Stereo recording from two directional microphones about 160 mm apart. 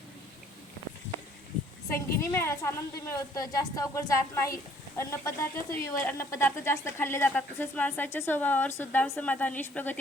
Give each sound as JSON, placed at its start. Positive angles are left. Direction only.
{"t": 2.1, "sound": "a woman's voice", "side_deg": 15}